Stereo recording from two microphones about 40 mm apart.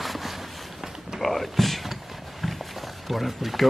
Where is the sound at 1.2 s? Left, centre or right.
Centre.